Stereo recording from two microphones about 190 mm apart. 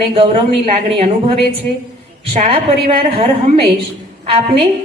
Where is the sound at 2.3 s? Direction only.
35° right (ahead or behind).